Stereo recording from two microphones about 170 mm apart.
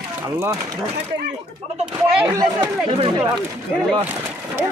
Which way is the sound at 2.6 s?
30° right (ahead or behind).